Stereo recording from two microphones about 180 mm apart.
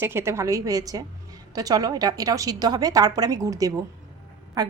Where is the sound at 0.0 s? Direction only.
15° right (ahead or behind).